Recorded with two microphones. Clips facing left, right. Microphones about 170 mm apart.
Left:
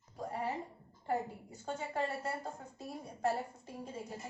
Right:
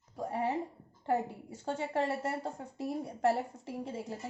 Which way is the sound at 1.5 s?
80° right.